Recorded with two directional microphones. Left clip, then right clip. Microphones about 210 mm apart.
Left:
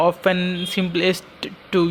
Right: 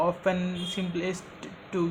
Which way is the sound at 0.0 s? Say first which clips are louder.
Left 8 dB; 30° left (ahead or behind).